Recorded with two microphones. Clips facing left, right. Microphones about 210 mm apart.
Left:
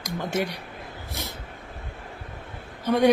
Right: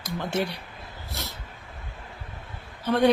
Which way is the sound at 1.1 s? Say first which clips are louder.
Left 1 dB; 15° left (ahead or behind).